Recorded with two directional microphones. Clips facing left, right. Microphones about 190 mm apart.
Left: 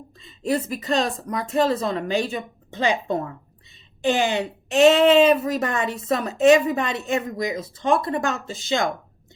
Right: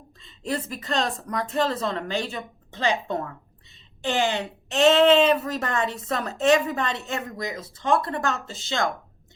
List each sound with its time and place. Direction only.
0.2 s a woman's voice: 10° left (ahead or behind)